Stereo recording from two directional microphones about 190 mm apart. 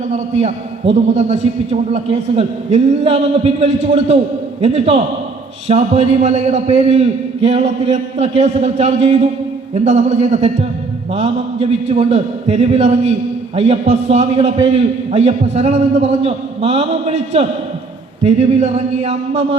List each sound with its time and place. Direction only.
0.1 s a man's voice: 35° right (ahead or behind)